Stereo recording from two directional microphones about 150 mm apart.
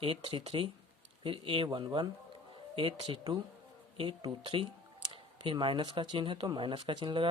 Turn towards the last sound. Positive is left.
turn(degrees=-30)  # may be behind; listen again after turning